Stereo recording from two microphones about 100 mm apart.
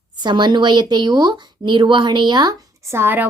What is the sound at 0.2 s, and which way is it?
Speech, 50° right (ahead or behind).